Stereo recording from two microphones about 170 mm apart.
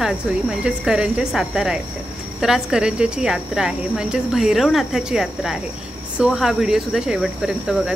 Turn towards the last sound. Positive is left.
turn(degrees=-5)  # may be behind; listen again after turning